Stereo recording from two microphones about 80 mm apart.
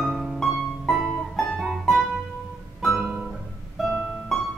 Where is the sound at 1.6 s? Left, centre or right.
Centre.